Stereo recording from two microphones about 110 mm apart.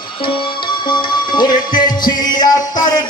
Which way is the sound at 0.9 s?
40° left (ahead or behind).